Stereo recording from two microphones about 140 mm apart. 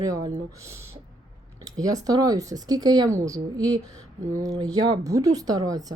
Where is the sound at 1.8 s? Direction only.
25° right (ahead or behind).